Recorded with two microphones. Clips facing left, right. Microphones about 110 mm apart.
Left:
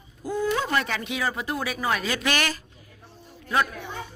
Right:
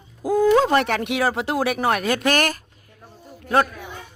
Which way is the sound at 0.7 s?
55° right (ahead or behind).